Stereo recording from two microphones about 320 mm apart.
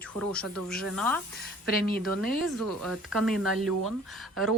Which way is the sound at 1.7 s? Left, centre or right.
Left.